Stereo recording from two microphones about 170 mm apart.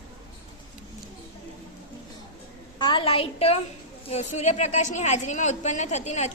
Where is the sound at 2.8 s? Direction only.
30° left (ahead or behind).